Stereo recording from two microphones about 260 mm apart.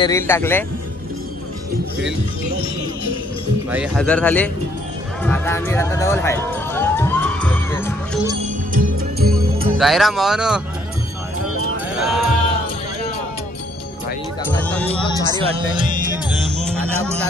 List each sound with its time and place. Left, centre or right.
0.0 s a man's voice: centre
3.7 s speech: centre
5.2 s music: centre
8.7 s music: right
9.8 s speech: centre
12.0 s speech: centre
14.5 s speech: centre
15.2 s speech: centre